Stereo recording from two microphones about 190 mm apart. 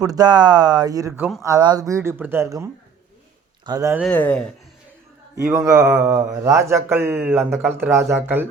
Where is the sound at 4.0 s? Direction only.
5° left (ahead or behind).